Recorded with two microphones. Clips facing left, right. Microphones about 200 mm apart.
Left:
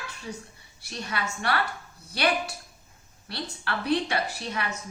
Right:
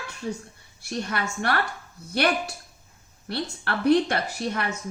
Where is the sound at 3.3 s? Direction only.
55° right (ahead or behind).